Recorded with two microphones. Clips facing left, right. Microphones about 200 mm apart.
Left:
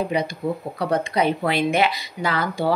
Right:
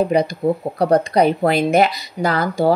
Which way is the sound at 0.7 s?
40° right (ahead or behind).